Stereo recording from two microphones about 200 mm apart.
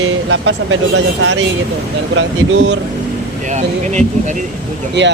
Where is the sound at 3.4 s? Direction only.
35° right (ahead or behind).